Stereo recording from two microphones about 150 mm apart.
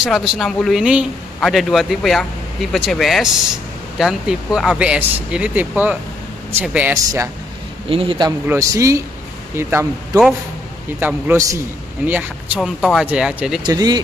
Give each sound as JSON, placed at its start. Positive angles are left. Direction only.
{"t": 0.0, "sound": "speech", "side_deg": 0}
{"t": 7.9, "sound": "speech", "side_deg": -35}
{"t": 8.5, "sound": "speech", "side_deg": -20}
{"t": 11.0, "sound": "speech", "side_deg": -10}
{"t": 13.7, "sound": "speech", "side_deg": -25}